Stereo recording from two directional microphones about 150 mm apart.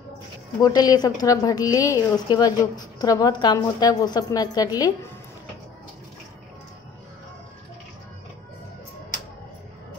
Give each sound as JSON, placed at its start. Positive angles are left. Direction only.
{"t": 0.6, "sound": "a woman's voice", "side_deg": 25}